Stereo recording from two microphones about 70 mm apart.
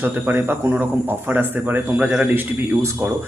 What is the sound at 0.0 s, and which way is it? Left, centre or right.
Speech, right.